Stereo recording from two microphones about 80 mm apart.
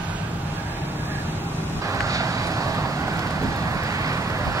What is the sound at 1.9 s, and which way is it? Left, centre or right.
Vehicle, right.